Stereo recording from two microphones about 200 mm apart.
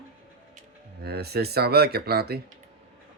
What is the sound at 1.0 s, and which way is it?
Speech, 55° right (ahead or behind).